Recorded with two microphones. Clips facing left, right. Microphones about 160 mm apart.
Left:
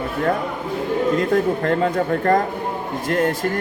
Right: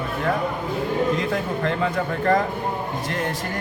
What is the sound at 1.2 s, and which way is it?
A man's voice, 50° left (ahead or behind).